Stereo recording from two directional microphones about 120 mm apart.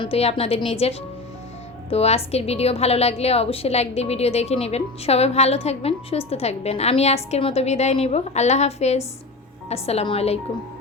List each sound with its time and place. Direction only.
0.0 s a woman's voice: 55° left (ahead or behind)